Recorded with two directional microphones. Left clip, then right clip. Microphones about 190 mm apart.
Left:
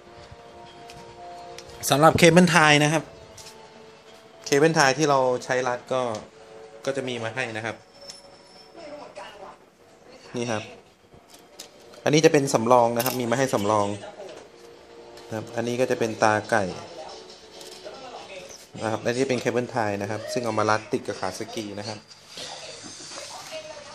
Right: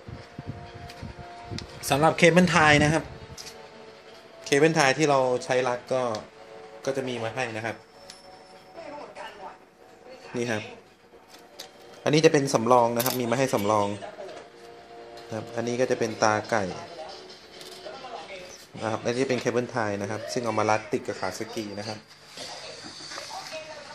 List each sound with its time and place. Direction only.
1.8 s speech: 20° left (ahead or behind)
4.5 s speech: centre (ahead or behind)
12.0 s speech: 5° left (ahead or behind)
15.3 s speech: 5° left (ahead or behind)
18.8 s speech: 5° left (ahead or behind)